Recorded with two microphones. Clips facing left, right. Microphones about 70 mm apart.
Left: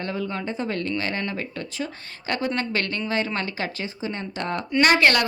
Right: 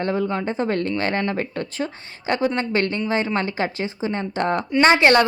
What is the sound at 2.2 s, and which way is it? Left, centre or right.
A woman's voice, right.